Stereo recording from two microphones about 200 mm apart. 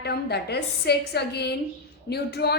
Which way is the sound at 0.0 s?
55° left (ahead or behind).